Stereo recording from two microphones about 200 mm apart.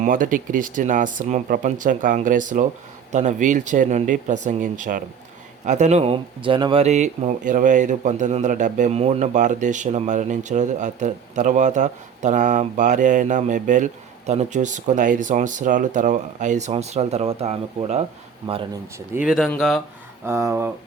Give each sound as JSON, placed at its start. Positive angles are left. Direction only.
{"t": 0.0, "sound": "speech", "side_deg": -40}
{"t": 18.9, "sound": "speech", "side_deg": -10}
{"t": 19.3, "sound": "speech", "side_deg": 0}
{"t": 20.2, "sound": "speech", "side_deg": -15}